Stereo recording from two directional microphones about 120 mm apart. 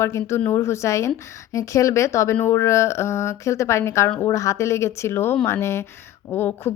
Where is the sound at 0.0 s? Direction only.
25° left (ahead or behind).